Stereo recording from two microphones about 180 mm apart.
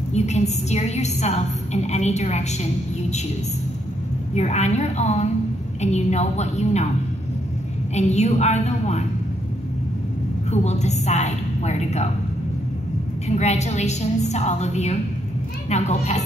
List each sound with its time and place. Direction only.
0.1 s a woman's voice: 40° left (ahead or behind)
4.3 s a woman's voice: 40° left (ahead or behind)
7.9 s a woman's voice: 40° left (ahead or behind)
10.5 s a woman's voice: 40° left (ahead or behind)
13.3 s a woman's voice: 40° left (ahead or behind)